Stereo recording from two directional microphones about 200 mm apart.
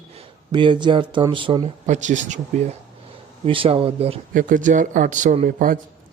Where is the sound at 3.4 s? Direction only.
25° right (ahead or behind).